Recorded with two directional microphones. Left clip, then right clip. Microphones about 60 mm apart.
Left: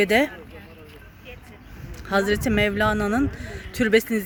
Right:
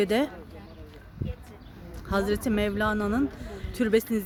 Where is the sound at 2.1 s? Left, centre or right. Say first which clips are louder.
Left 5 dB; left.